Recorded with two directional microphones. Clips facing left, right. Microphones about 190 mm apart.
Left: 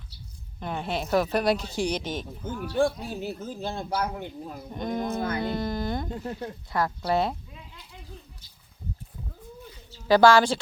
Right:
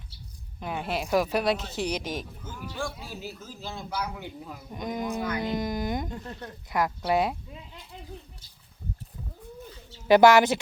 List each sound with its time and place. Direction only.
0.6 s a woman's voice: 5° right (ahead or behind)
2.4 s a man's voice: 55° left (ahead or behind)
4.7 s a woman's voice: 10° right (ahead or behind)
10.1 s speech: 20° right (ahead or behind)